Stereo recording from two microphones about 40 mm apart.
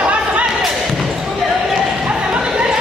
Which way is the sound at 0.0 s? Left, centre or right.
Right.